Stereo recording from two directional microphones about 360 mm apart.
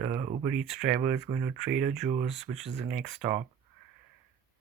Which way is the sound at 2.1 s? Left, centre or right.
Centre.